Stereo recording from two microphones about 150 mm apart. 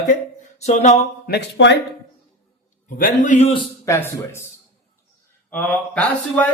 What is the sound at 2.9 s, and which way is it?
Speech, 65° left (ahead or behind).